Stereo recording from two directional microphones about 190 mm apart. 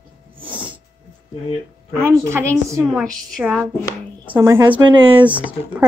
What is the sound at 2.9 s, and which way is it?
Speech, centre (ahead or behind).